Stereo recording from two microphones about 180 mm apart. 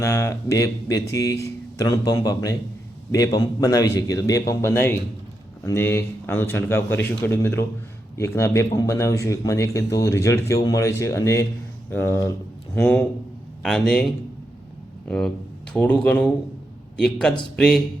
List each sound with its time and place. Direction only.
0.0 s a man's voice: 15° left (ahead or behind)